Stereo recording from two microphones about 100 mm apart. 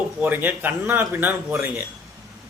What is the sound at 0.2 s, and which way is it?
A man's voice, 20° right (ahead or behind).